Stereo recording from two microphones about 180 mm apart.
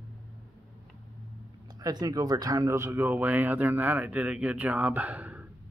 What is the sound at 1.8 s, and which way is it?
Speech, 20° right (ahead or behind).